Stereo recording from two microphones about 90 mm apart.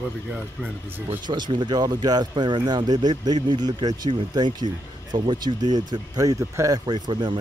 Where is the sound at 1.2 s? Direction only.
55° right (ahead or behind); by 6.8 s 35° right (ahead or behind).